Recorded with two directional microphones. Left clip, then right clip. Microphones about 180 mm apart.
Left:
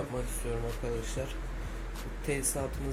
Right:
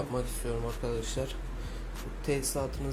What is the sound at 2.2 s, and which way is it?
Speech, 5° right (ahead or behind).